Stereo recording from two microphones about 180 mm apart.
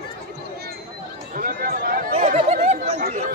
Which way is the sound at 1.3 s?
50° right (ahead or behind).